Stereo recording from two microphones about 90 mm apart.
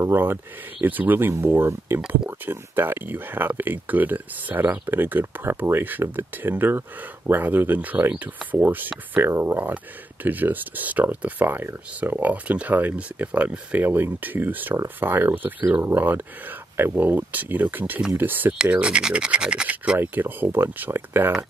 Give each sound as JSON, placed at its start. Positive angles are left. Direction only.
{"t": 0.0, "sound": "speech", "side_deg": -25}
{"t": 18.6, "sound": "speech", "side_deg": -10}